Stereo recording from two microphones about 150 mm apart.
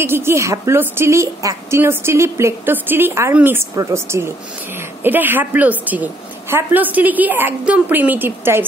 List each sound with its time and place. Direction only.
0.0 s a woman's voice: 15° right (ahead or behind)